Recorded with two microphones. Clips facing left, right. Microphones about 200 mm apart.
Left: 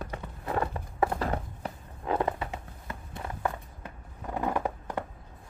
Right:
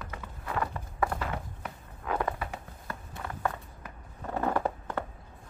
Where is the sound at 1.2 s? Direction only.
35° left (ahead or behind).